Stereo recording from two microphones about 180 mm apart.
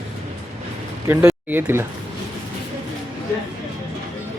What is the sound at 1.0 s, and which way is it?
Speech, 15° right (ahead or behind).